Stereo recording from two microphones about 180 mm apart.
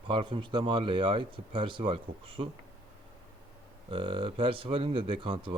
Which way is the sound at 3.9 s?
30° right (ahead or behind).